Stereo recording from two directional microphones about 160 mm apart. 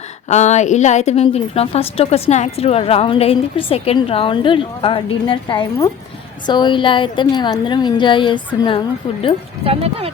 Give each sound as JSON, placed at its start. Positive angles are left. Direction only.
{"t": 0.3, "sound": "a woman's voice", "side_deg": 45}
{"t": 9.6, "sound": "speech", "side_deg": -35}